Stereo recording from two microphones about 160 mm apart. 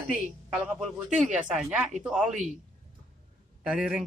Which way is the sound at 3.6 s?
5° right (ahead or behind).